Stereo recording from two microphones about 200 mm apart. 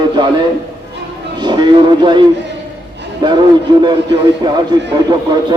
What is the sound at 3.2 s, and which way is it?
Speech, 20° right (ahead or behind).